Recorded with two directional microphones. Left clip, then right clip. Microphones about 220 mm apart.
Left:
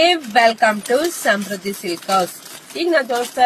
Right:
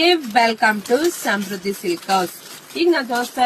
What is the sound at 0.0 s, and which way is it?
Speech, 15° left (ahead or behind).